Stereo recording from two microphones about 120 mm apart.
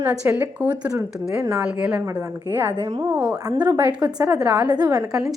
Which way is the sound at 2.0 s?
30° right (ahead or behind).